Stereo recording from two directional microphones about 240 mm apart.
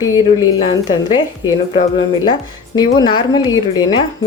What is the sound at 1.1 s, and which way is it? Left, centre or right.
A woman's voice, centre.